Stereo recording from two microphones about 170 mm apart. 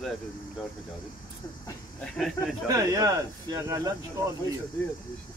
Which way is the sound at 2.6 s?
20° right (ahead or behind).